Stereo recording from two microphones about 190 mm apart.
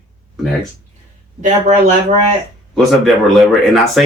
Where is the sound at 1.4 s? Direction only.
40° right (ahead or behind).